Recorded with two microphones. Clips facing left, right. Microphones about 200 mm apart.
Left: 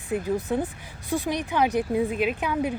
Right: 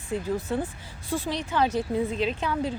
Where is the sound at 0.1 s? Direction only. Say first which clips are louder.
Left 2 dB; 15° left (ahead or behind).